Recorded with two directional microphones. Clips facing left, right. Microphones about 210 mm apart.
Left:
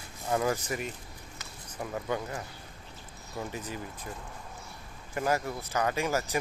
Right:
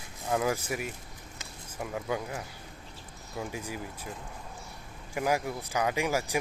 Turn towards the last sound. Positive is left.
turn(degrees=-15)  # may be behind; listen again after turning